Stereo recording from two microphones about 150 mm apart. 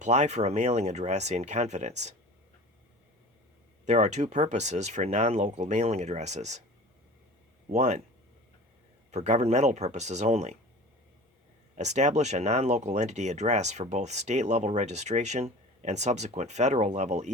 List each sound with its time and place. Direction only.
0.0 s speech: 50° right (ahead or behind)
3.8 s speech: 50° right (ahead or behind)
7.7 s speech: 50° right (ahead or behind)
9.1 s speech: 50° right (ahead or behind)
11.8 s speech: 50° right (ahead or behind)